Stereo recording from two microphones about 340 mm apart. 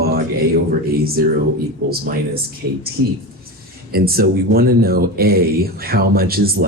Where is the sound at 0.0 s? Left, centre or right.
Right.